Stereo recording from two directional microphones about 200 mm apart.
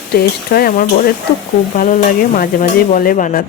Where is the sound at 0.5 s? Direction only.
45° left (ahead or behind).